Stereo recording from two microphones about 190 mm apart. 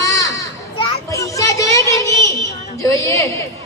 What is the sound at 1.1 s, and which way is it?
Children playing, 15° left (ahead or behind).